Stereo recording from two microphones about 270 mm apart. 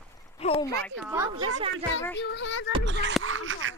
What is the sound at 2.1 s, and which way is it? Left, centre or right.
Child singing, left.